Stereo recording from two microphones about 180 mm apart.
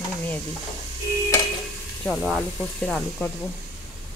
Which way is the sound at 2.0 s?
Centre (ahead or behind).